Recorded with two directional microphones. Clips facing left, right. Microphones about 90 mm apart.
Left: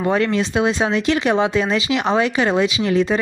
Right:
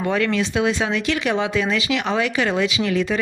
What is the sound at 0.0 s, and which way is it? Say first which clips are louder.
Speech: left 2 dB; 30° left (ahead or behind).